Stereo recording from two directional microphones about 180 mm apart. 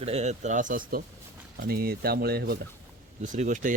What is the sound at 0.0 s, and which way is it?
Speech, 35° right (ahead or behind).